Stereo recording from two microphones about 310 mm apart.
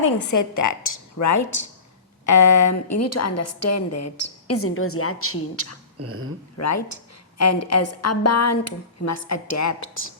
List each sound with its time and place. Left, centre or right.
0.0 s a woman's voice: left
6.0 s speech: right
6.6 s a woman's voice: left